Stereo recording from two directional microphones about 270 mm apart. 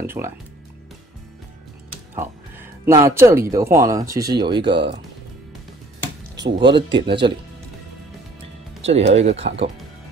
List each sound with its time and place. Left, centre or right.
0.0 s speech: centre
2.8 s speech: centre
6.3 s speech: centre
8.8 s speech: right